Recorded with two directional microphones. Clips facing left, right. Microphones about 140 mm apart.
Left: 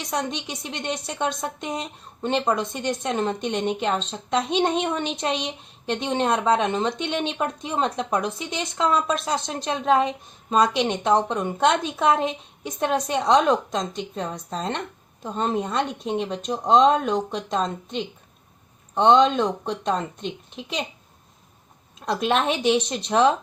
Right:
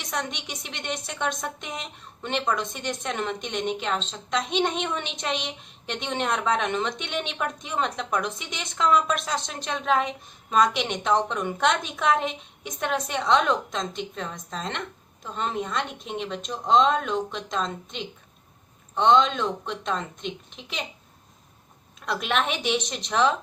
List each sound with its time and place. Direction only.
0.0 s a woman's voice: 35° left (ahead or behind)
22.0 s a woman's voice: 35° left (ahead or behind)